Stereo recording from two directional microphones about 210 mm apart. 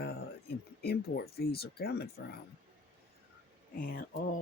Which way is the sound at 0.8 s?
50° left (ahead or behind).